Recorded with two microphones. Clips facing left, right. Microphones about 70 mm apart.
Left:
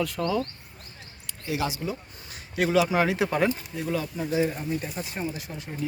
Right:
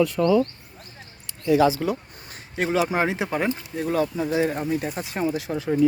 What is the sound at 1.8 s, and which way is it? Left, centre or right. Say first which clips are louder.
Speech: right 7 dB; right.